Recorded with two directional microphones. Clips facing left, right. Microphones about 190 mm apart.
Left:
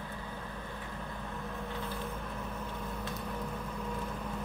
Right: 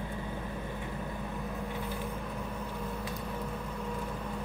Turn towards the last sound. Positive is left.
turn(degrees=-5)  # may be behind; listen again after turning